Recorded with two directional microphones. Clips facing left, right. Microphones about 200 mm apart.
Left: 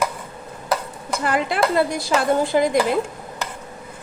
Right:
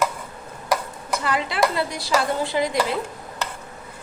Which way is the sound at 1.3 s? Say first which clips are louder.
Left 3 dB; 50° left (ahead or behind).